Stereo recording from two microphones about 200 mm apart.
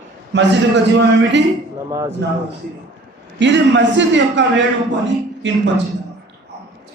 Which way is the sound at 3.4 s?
65° right (ahead or behind).